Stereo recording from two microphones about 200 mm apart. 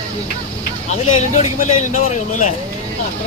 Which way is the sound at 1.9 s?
40° left (ahead or behind).